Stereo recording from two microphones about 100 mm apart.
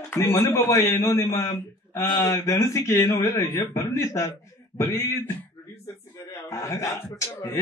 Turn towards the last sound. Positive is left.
turn(degrees=30)  # may be behind; listen again after turning